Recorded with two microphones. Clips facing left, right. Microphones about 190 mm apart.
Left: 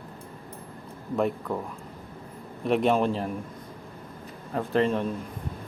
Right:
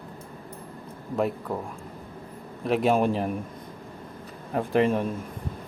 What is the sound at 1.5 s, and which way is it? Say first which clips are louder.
A man's voice: even; 5° right (ahead or behind).